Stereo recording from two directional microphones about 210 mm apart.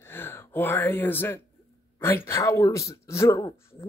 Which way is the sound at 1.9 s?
10° left (ahead or behind).